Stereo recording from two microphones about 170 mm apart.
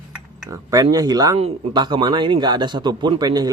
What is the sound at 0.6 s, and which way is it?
A man's voice, 20° right (ahead or behind).